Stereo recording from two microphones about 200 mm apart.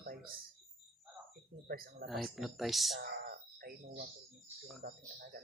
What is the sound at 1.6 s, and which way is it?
Speech, 50° right (ahead or behind).